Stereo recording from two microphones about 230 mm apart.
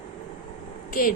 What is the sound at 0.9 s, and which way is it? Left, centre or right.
Speech, left.